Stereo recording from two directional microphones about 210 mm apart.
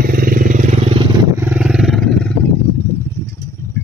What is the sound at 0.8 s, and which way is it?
Vehicle, 25° right (ahead or behind).